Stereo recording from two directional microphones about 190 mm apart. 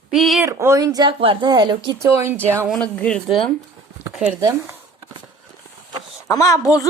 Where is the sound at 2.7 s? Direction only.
5° left (ahead or behind).